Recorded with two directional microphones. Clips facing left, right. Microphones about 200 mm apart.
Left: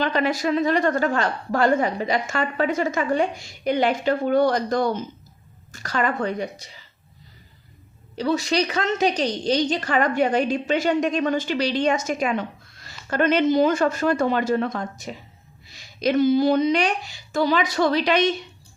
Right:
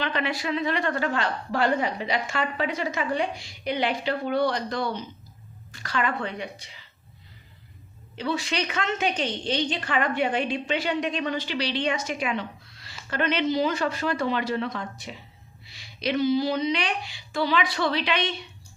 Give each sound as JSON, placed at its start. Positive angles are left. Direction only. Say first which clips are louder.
{"t": 0.0, "sound": "a woman's voice", "louder": "left 6 dB", "side_deg": 40}
{"t": 8.1, "sound": "a woman's voice", "louder": "left 6 dB", "side_deg": 40}